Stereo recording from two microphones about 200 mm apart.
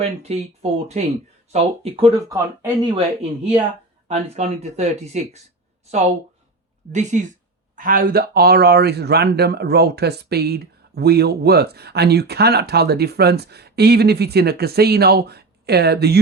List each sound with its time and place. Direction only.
0.0 s speech: 30° right (ahead or behind)
2.3 s a woman's voice: 20° right (ahead or behind); by 16.2 s 55° right (ahead or behind)